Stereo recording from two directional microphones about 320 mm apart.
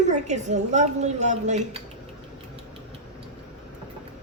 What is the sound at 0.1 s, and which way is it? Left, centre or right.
Speech, right.